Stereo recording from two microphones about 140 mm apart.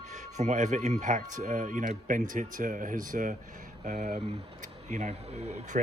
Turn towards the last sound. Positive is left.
turn(degrees=-50)  # may be behind; listen again after turning